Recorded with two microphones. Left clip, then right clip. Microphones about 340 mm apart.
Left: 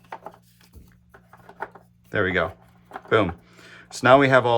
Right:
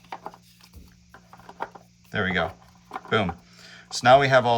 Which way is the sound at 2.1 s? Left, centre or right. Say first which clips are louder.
Left 3 dB; centre.